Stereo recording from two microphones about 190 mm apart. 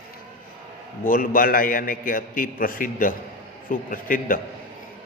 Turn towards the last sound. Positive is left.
turn(degrees=45)  # may be behind; listen again after turning